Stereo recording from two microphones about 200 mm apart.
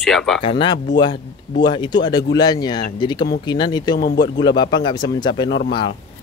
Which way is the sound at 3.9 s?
55° left (ahead or behind).